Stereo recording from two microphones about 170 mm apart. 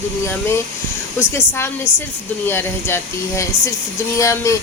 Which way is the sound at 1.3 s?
15° left (ahead or behind).